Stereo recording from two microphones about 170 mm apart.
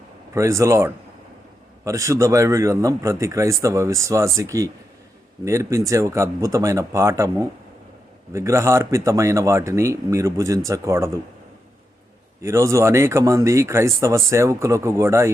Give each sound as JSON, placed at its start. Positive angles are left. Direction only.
{"t": 0.3, "sound": "a man's voice", "side_deg": -15}
{"t": 12.4, "sound": "a man's voice", "side_deg": -15}